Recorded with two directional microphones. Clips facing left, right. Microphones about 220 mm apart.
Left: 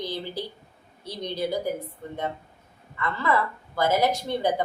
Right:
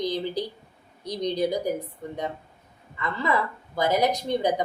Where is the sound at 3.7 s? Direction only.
15° right (ahead or behind).